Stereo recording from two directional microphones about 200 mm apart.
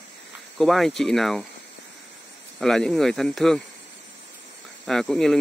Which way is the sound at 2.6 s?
5° left (ahead or behind).